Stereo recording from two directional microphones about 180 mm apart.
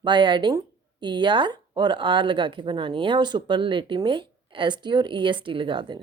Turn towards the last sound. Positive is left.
turn(degrees=-25)  # may be behind; listen again after turning